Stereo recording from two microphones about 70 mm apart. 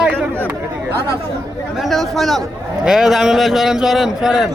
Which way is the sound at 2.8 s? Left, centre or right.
Centre.